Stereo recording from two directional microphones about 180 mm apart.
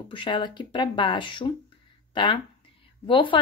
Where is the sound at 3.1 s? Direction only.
30° left (ahead or behind).